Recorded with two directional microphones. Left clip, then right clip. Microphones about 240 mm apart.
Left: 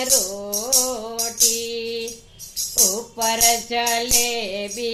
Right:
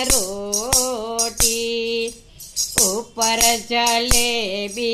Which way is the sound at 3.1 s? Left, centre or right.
Right.